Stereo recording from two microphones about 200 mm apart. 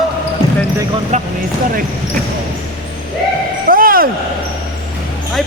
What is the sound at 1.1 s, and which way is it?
Speech, 35° right (ahead or behind).